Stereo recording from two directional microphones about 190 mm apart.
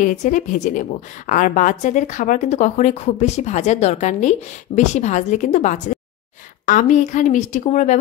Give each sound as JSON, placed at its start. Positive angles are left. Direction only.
{"t": 0.0, "sound": "a woman's voice", "side_deg": 40}